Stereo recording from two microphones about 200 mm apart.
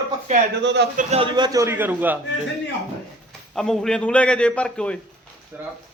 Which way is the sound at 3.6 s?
Centre (ahead or behind).